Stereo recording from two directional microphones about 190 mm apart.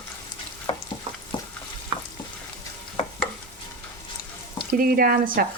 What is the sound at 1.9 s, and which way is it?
Stir, 20° right (ahead or behind).